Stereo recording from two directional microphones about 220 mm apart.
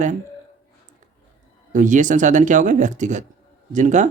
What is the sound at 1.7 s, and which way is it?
Speech, 35° right (ahead or behind).